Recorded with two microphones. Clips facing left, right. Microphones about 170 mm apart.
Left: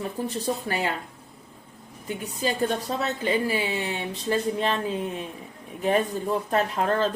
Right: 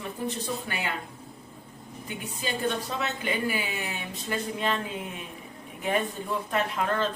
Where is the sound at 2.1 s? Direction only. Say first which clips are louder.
Left 5 dB; 35° left (ahead or behind).